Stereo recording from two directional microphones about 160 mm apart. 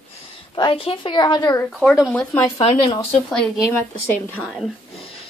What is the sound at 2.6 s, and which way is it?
Speech, 30° left (ahead or behind).